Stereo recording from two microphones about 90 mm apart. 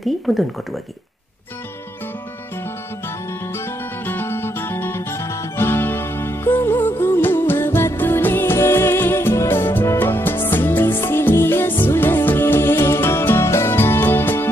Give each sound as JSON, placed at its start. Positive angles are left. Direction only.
{"t": 0.3, "sound": "speech", "side_deg": 0}
{"t": 3.5, "sound": "music", "side_deg": 20}